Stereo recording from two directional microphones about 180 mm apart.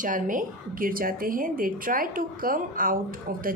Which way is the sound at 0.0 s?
50° right (ahead or behind).